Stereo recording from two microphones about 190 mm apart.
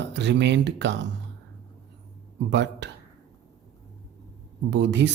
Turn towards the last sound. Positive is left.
turn(degrees=-65)  # may be behind; listen again after turning